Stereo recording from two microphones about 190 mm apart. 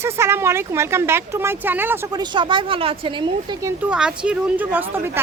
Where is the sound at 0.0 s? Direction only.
15° right (ahead or behind).